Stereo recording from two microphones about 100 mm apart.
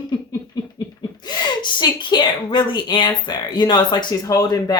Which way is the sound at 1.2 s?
50° left (ahead or behind).